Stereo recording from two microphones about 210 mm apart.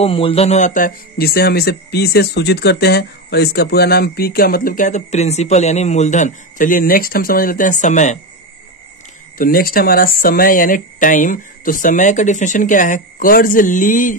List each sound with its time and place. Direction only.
0.0 s speech: 25° left (ahead or behind)
9.4 s speech: 45° left (ahead or behind)